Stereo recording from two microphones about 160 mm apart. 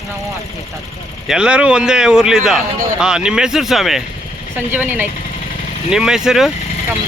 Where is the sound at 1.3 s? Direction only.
5° right (ahead or behind).